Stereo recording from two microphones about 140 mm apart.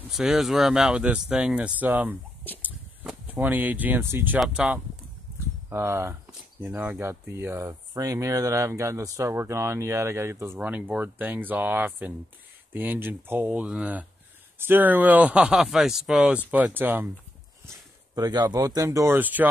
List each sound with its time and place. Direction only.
0.1 s speech: 5° right (ahead or behind)
2.6 s a sound: 10° right (ahead or behind)
4.4 s speech: 5° right (ahead or behind)
5.7 s speech: 20° right (ahead or behind)
18.1 s speech: 30° right (ahead or behind); by 19.4 s 15° right (ahead or behind)